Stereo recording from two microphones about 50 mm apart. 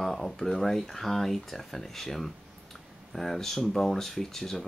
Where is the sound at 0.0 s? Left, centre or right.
Centre.